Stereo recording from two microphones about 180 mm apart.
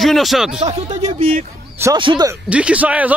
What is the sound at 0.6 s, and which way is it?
Speech, 35° right (ahead or behind).